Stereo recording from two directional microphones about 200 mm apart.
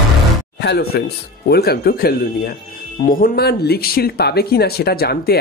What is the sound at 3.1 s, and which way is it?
Speech, 50° left (ahead or behind).